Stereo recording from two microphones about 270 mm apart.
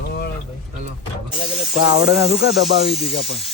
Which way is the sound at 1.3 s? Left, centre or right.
Centre.